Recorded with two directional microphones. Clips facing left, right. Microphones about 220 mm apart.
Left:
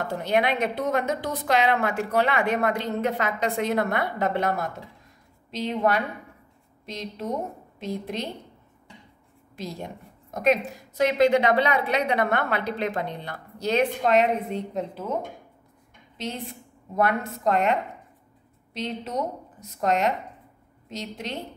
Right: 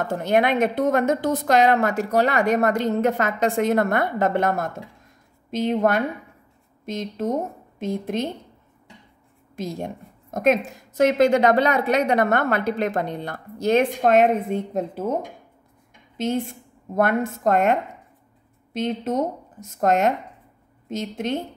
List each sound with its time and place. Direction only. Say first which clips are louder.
0.1 s a woman's voice: right 4 dB; 50° right (ahead or behind)
9.6 s a woman's voice: right 5 dB; 50° right (ahead or behind)
16.9 s a woman's voice: right 4 dB; 50° right (ahead or behind)